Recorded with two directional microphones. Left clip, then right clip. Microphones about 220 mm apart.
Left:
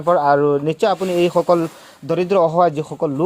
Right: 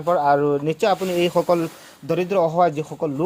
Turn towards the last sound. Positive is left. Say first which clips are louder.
# left 4 dB
turn(degrees=25)  # may be behind; listen again after turning